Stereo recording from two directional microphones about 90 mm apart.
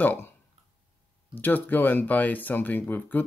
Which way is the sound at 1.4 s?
20° left (ahead or behind).